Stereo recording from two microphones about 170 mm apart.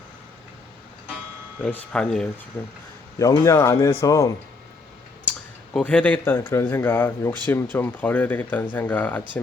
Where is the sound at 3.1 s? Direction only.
20° left (ahead or behind).